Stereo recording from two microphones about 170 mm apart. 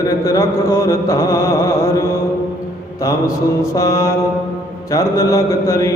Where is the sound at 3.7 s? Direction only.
20° left (ahead or behind).